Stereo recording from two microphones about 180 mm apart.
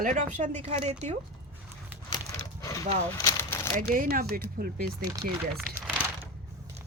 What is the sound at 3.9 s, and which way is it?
Speech, 55° right (ahead or behind).